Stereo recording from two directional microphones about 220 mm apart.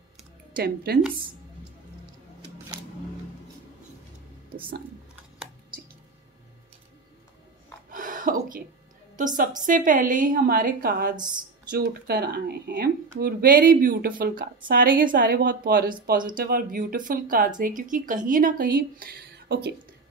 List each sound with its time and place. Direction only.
0.9 s speech: 45° right (ahead or behind)
7.9 s a sound: 35° right (ahead or behind)
9.1 s speech: 35° right (ahead or behind)